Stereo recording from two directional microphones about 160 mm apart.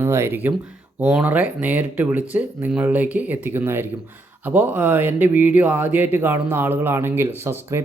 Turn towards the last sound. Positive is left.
turn(degrees=-15)  # may be behind; listen again after turning